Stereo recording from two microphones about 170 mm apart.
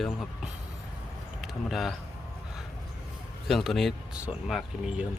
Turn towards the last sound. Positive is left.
turn(degrees=0)  # may be behind; listen again after turning